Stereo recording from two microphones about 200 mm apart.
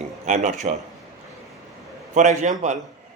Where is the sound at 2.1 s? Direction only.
35° right (ahead or behind).